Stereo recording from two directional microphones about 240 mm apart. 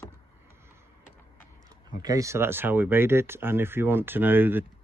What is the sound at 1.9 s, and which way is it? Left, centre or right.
Speech, centre.